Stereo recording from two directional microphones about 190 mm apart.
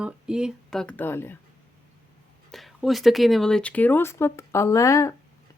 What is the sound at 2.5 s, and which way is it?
Speech, centre (ahead or behind).